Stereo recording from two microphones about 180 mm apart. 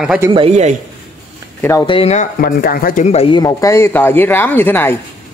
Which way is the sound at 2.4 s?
55° left (ahead or behind).